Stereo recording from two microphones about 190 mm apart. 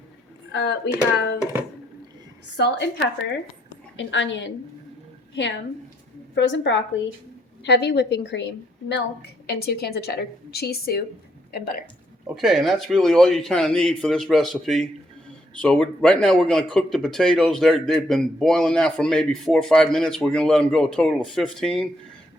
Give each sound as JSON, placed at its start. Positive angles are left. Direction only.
{"t": 0.5, "sound": "a woman's voice", "side_deg": 65}
{"t": 2.6, "sound": "a woman's voice", "side_deg": 65}
{"t": 3.9, "sound": "a woman's voice", "side_deg": 75}
{"t": 9.5, "sound": "a woman's voice", "side_deg": 55}
{"t": 12.3, "sound": "speech", "side_deg": 0}